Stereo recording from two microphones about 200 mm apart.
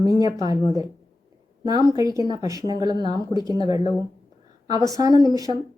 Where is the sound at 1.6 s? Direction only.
20° right (ahead or behind).